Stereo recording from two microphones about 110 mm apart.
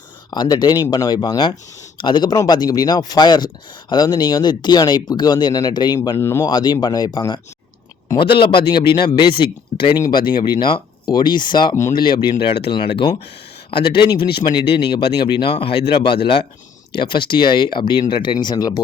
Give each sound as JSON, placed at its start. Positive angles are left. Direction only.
{"t": 0.3, "sound": "speech", "side_deg": 40}
{"t": 6.1, "sound": "speech", "side_deg": 25}
{"t": 6.4, "sound": "speech", "side_deg": 40}